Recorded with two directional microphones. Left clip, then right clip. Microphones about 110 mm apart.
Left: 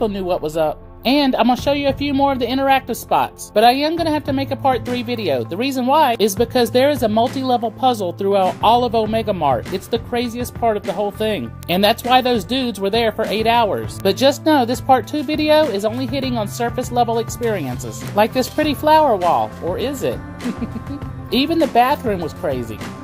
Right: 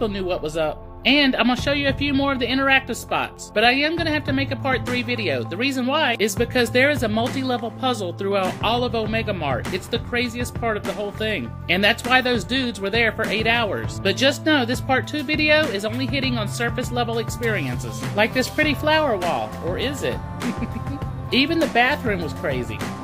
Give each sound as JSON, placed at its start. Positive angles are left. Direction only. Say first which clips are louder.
{"t": 0.0, "sound": "speech", "louder": "left 4 dB", "side_deg": 45}
{"t": 14.0, "sound": "speech", "louder": "left 4 dB", "side_deg": 45}
{"t": 18.1, "sound": "speech", "louder": "left 4 dB", "side_deg": 50}
{"t": 21.3, "sound": "speech", "louder": "left 3 dB", "side_deg": 50}